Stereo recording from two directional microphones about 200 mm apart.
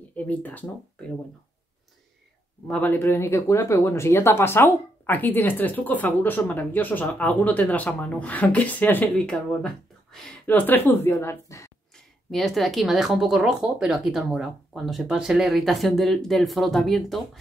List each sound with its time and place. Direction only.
0.1 s speech: 10° left (ahead or behind)
2.7 s speech: 10° left (ahead or behind)
12.3 s speech: centre (ahead or behind)